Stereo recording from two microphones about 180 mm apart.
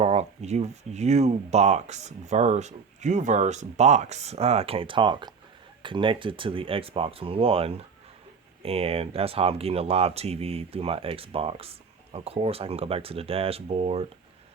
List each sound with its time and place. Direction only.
0.0 s speech: 35° right (ahead or behind)